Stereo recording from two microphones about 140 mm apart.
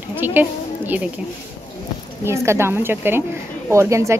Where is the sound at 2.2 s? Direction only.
20° right (ahead or behind).